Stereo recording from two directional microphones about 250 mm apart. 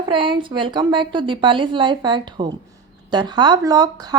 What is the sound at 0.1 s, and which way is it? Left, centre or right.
A woman's voice, centre.